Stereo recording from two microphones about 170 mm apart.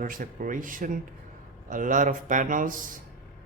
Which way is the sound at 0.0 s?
55° right (ahead or behind).